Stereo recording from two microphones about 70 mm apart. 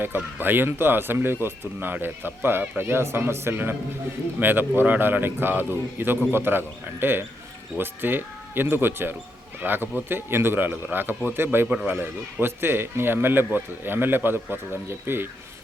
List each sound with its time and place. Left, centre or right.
0.3 s a man's voice: right